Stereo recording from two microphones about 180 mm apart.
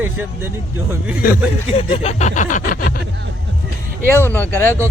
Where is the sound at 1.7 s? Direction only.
35° left (ahead or behind); by 2.9 s 50° left (ahead or behind).